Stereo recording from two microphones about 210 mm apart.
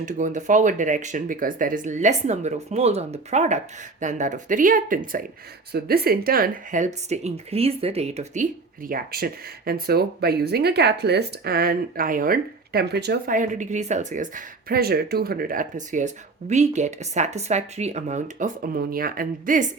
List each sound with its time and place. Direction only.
0.0 s speech: 35° right (ahead or behind)